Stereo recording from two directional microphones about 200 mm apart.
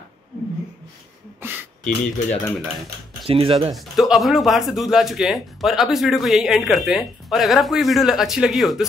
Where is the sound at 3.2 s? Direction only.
30° right (ahead or behind).